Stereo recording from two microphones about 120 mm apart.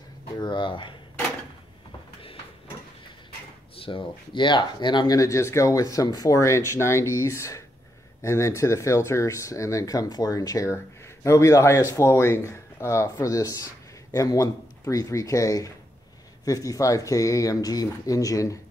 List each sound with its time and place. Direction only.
0.4 s speech: 40° left (ahead or behind)
3.7 s speech: 45° left (ahead or behind); by 18.6 s 30° left (ahead or behind)